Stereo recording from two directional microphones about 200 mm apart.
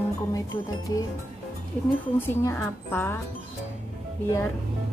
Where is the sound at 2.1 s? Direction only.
10° left (ahead or behind).